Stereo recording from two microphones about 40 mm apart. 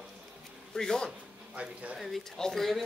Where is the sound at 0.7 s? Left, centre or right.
Centre.